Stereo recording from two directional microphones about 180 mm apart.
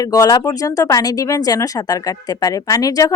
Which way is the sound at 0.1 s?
20° left (ahead or behind).